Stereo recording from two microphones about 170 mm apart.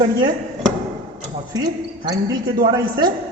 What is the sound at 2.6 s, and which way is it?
Speech, 25° right (ahead or behind).